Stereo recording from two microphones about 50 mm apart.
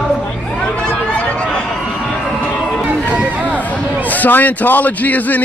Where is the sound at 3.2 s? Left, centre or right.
Right.